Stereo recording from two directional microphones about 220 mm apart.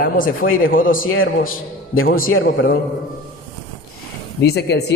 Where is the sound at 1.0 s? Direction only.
65° left (ahead or behind).